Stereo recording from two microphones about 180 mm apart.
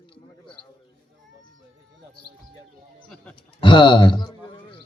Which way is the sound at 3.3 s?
25° left (ahead or behind).